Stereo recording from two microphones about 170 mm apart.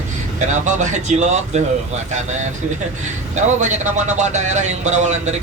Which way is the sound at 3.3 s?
45° right (ahead or behind).